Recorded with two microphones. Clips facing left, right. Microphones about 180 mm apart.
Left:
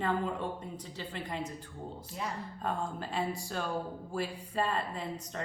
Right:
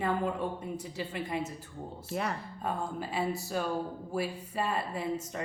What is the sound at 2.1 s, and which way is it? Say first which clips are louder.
Speech: right 6 dB; 65° right (ahead or behind).